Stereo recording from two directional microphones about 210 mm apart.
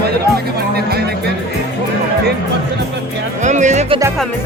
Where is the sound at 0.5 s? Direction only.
50° right (ahead or behind).